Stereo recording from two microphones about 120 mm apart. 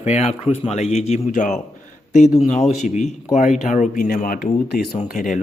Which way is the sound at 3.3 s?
90° left.